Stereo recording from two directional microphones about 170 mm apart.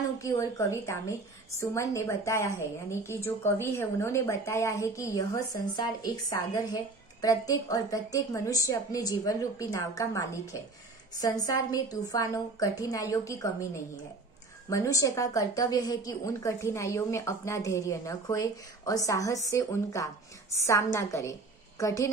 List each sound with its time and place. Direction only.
0.2 s a woman's voice: 20° left (ahead or behind)
14.7 s a woman's voice: 20° left (ahead or behind)